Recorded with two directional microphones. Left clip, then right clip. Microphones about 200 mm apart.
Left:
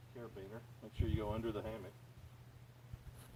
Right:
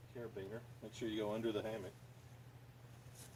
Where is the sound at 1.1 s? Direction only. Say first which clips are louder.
Right 2 dB; 25° right (ahead or behind).